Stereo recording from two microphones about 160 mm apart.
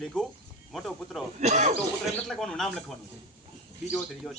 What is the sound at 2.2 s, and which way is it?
Speech, centre (ahead or behind).